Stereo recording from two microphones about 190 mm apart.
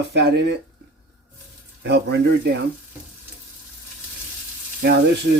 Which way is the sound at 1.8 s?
60° right (ahead or behind).